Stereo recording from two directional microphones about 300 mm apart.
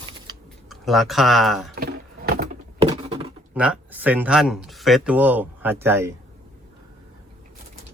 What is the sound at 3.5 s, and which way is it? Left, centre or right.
Speech, centre.